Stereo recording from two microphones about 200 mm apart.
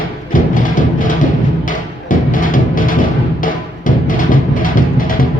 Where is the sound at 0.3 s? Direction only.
40° left (ahead or behind).